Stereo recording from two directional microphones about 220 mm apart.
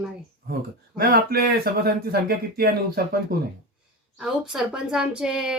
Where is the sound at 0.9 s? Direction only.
45° right (ahead or behind).